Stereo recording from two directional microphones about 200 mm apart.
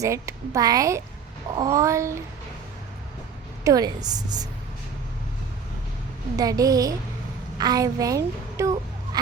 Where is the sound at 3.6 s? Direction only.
20° right (ahead or behind).